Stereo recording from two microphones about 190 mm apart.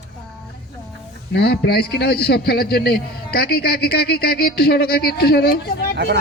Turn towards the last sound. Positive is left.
turn(degrees=55)  # may be behind; listen again after turning